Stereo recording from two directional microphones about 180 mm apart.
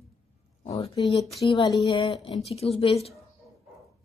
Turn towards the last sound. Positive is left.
turn(degrees=35)  # may be behind; listen again after turning